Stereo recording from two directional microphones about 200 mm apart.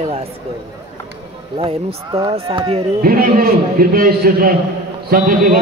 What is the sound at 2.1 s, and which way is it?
Speech, 25° right (ahead or behind).